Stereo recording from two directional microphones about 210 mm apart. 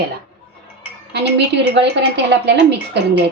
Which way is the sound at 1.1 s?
55° right (ahead or behind).